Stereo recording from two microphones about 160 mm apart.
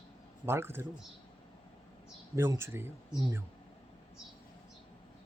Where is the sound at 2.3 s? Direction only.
15° right (ahead or behind).